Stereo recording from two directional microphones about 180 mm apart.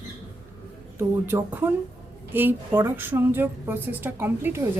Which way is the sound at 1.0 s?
10° right (ahead or behind).